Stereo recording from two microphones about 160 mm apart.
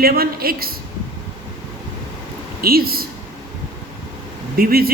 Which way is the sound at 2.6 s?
70° right (ahead or behind).